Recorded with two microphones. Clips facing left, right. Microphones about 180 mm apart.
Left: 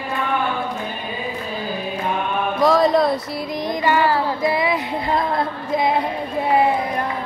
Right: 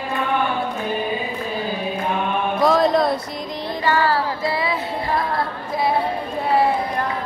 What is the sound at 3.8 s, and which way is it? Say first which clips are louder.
Child singing: left 1 dB; 15° left (ahead or behind).